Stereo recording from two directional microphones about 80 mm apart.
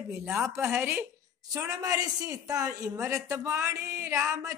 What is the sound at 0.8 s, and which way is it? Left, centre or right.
Speech, right.